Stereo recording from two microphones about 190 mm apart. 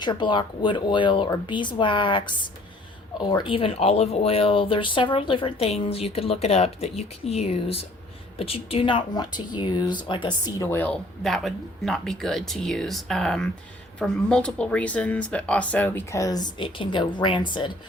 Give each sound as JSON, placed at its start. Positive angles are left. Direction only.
{"t": 0.0, "sound": "speech", "side_deg": 25}